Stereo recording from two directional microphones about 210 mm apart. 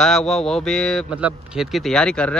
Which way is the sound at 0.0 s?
Centre (ahead or behind).